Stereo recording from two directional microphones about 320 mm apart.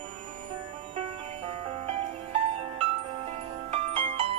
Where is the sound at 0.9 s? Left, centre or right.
Centre.